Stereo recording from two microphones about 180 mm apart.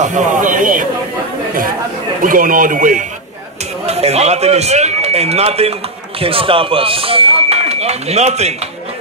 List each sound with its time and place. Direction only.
0.0 s speech: 45° right (ahead or behind)
2.2 s speech: 50° right (ahead or behind)
3.8 s a man's voice: 35° right (ahead or behind)